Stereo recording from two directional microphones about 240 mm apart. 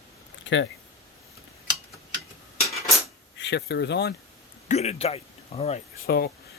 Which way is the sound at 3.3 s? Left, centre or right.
Left.